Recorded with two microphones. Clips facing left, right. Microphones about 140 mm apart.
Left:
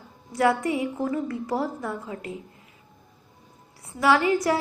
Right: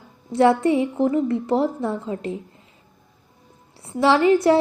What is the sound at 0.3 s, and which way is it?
A woman's voice, 25° right (ahead or behind).